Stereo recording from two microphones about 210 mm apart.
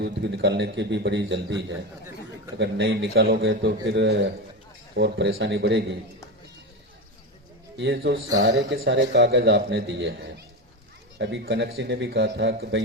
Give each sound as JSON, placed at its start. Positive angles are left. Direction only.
{"t": 0.0, "sound": "a man's voice", "side_deg": -55}
{"t": 7.8, "sound": "a man's voice", "side_deg": -55}